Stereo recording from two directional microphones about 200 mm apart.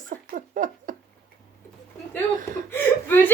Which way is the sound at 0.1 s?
40° right (ahead or behind).